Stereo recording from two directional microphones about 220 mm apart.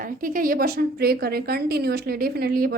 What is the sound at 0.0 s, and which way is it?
A woman's voice, 40° right (ahead or behind).